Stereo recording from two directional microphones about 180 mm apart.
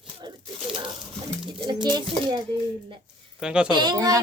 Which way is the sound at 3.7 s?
25° right (ahead or behind).